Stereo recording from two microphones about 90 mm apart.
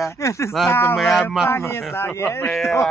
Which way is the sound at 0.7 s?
25° left (ahead or behind).